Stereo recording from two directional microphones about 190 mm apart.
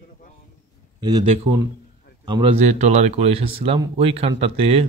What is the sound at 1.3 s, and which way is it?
Speech, 35° right (ahead or behind).